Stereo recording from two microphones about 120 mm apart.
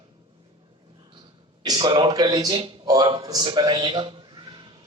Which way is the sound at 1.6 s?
40° right (ahead or behind).